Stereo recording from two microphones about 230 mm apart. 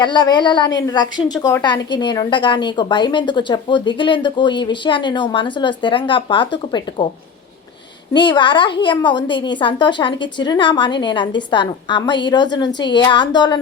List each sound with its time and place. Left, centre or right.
0.0 s a woman's voice: centre
8.1 s a woman's voice: centre